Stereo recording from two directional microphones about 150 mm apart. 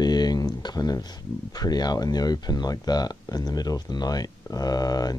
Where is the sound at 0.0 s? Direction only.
25° left (ahead or behind).